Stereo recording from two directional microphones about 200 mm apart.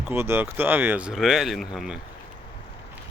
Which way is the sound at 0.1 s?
10° right (ahead or behind).